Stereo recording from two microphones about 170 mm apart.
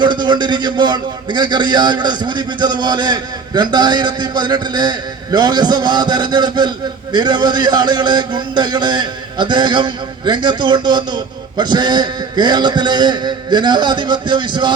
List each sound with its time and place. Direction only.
0.0 s a man's voice: 25° right (ahead or behind)